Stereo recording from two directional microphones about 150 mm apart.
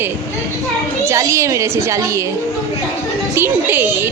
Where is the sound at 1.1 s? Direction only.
20° right (ahead or behind).